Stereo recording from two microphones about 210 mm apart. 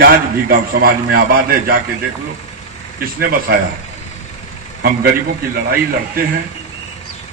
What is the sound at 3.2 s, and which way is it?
Speech, 45° right (ahead or behind).